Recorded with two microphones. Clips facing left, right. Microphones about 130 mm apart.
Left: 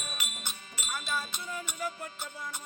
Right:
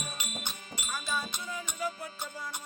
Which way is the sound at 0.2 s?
20° right (ahead or behind).